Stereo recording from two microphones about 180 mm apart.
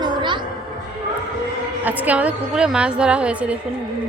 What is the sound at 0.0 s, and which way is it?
Music, 25° right (ahead or behind).